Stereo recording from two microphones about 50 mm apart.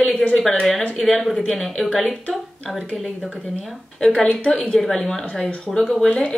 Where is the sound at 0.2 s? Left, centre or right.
Left.